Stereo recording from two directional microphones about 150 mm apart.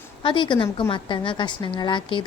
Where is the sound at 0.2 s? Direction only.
30° left (ahead or behind).